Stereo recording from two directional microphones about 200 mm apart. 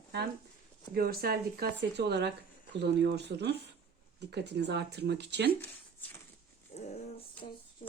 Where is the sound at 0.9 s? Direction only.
50° right (ahead or behind).